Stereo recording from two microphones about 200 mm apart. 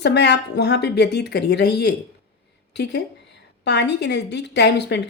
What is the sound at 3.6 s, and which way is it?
A woman's voice, 55° left (ahead or behind).